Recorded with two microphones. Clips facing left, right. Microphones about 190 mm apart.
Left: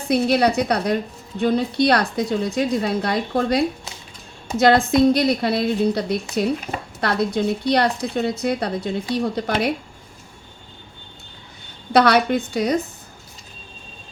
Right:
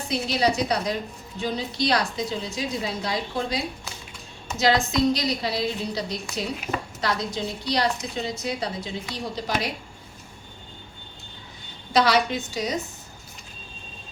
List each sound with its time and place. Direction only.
0.1 s a woman's voice: 60° left (ahead or behind)
11.9 s a woman's voice: 55° left (ahead or behind)